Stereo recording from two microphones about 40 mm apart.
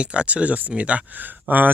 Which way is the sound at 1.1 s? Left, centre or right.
Right.